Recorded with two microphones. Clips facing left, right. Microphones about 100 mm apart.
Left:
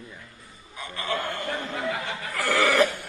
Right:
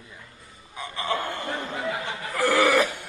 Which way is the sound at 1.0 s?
20° right (ahead or behind).